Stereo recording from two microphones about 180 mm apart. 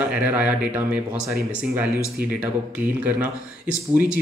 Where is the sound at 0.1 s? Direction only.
10° right (ahead or behind).